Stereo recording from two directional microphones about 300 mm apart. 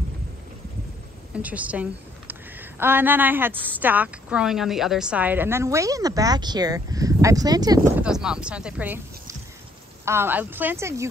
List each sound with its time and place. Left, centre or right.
1.3 s a woman's voice: centre